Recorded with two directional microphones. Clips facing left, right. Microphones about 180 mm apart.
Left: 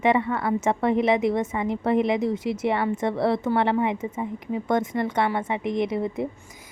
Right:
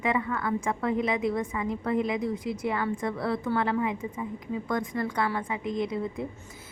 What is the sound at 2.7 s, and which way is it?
A woman's voice, 25° left (ahead or behind).